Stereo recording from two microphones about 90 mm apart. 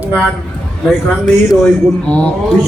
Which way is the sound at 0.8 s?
5° left (ahead or behind).